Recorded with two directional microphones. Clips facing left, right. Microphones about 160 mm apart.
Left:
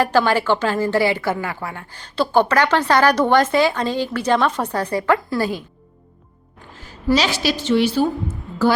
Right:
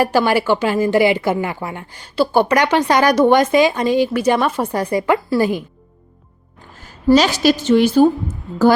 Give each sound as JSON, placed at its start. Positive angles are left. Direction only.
{"t": 0.0, "sound": "speech", "side_deg": -10}
{"t": 6.8, "sound": "a woman's voice", "side_deg": -45}